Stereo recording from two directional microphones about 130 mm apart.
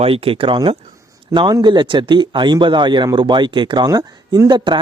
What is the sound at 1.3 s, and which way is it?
Speech, 35° right (ahead or behind).